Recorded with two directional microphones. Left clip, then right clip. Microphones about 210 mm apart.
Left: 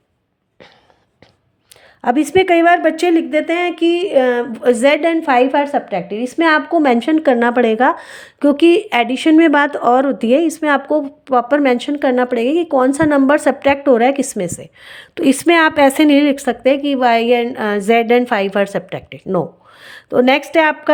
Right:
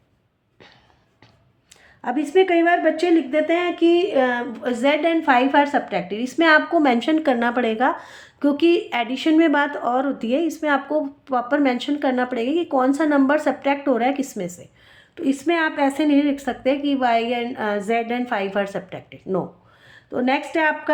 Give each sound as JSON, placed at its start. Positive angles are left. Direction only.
{"t": 2.0, "sound": "a woman's voice", "side_deg": 50}